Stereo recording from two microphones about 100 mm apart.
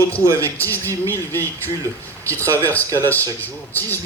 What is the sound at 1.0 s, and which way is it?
Speech, 20° left (ahead or behind).